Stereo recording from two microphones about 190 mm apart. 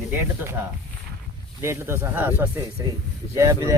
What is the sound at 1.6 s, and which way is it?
Speech, 15° right (ahead or behind).